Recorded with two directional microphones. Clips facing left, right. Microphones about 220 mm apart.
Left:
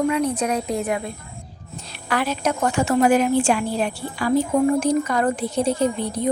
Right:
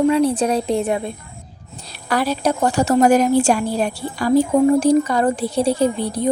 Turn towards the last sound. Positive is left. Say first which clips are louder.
# right 3 dB
turn(degrees=-35)  # may be behind; listen again after turning